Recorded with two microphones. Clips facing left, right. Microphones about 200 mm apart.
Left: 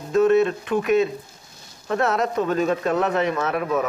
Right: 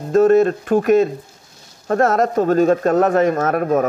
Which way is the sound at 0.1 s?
45° right (ahead or behind).